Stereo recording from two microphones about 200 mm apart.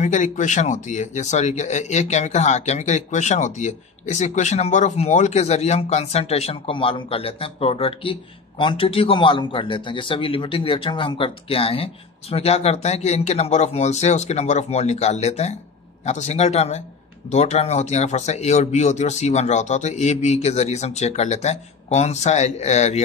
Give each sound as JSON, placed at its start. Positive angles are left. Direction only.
{"t": 0.0, "sound": "speech", "side_deg": 35}